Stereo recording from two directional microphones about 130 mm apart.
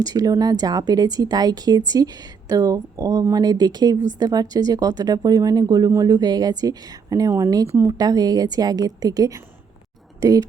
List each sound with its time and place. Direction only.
0.0 s speech: 30° right (ahead or behind)